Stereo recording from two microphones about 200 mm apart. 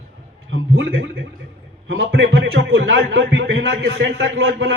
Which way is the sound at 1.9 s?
70° right (ahead or behind).